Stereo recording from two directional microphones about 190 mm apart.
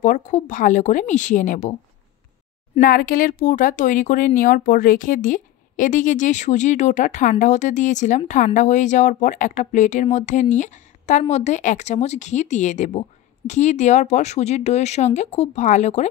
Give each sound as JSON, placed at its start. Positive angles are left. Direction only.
{"t": 0.0, "sound": "speech", "side_deg": 40}
{"t": 2.8, "sound": "speech", "side_deg": 50}